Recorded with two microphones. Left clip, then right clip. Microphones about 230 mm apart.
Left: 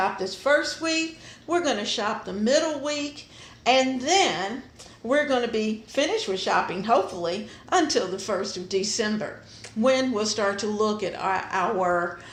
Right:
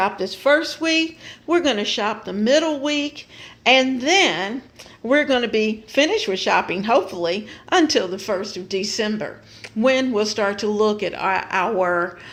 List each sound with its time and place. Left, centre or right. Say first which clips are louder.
0.0 s speech: right 5 dB; right